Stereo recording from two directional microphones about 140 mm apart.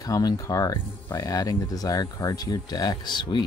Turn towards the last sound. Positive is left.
turn(degrees=35)  # may be behind; listen again after turning